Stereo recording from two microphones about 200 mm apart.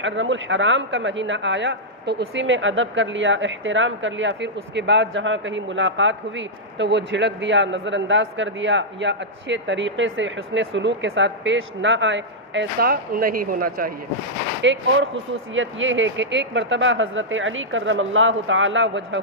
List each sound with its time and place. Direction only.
0.0 s a woman's voice: 70° right (ahead or behind); by 13.9 s 45° right (ahead or behind)
14.6 s a woman's voice: 65° right (ahead or behind)